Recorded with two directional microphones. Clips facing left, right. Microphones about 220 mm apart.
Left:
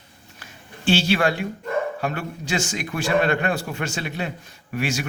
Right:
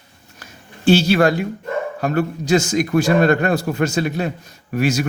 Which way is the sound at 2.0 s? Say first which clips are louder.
Right 8 dB; 40° right (ahead or behind).